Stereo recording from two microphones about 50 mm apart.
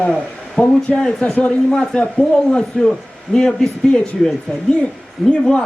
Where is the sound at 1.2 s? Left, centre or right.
Left.